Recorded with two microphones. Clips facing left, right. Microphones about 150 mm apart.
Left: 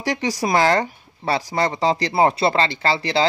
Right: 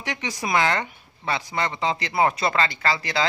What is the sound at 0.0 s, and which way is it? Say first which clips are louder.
Speech: left 7 dB; 35° left (ahead or behind).